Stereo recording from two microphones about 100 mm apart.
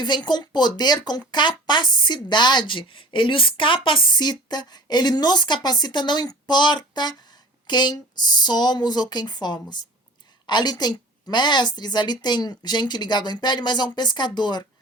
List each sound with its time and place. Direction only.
0.0 s a woman's voice: 50° left (ahead or behind)